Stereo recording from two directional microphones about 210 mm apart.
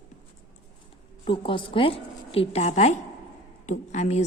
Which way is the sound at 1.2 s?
25° left (ahead or behind).